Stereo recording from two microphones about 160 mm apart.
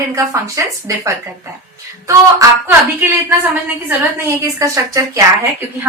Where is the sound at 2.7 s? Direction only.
15° right (ahead or behind).